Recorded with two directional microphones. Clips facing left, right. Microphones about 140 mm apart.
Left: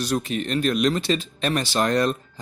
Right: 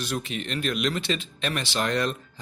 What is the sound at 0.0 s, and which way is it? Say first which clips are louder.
Speech: left 6 dB; 40° left (ahead or behind).